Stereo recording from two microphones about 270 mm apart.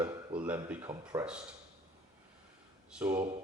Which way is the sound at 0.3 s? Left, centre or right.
Centre.